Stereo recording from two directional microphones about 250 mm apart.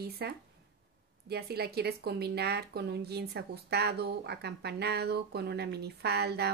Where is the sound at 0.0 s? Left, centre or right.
Right.